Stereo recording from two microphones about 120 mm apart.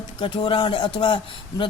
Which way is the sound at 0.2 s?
45° left (ahead or behind).